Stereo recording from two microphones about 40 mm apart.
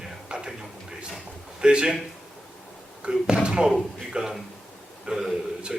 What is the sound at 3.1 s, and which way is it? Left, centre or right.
A man's voice, centre.